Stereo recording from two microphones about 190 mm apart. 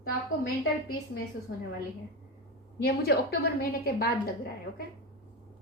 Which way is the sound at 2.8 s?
55° left (ahead or behind).